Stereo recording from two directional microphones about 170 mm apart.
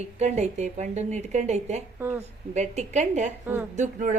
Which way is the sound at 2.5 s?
40° right (ahead or behind).